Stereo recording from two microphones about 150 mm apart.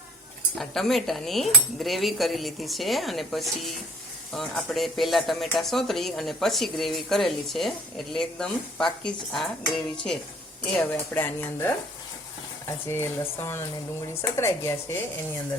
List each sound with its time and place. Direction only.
0.6 s speech: centre (ahead or behind); by 14.9 s 20° left (ahead or behind)